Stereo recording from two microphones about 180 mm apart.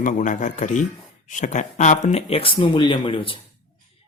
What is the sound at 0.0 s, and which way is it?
A man's voice, 45° left (ahead or behind).